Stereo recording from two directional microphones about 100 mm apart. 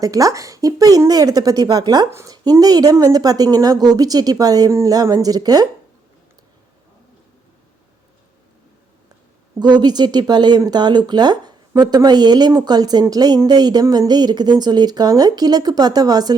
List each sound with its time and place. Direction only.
0.0 s speech: 35° right (ahead or behind)
2.0 s speech: 25° right (ahead or behind)
2.3 s speech: 40° right (ahead or behind)
9.6 s speech: 45° right (ahead or behind)